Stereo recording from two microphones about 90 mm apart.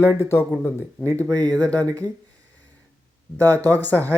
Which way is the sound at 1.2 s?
40° right (ahead or behind).